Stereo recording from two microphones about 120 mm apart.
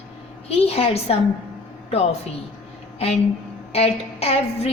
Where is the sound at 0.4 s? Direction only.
55° left (ahead or behind).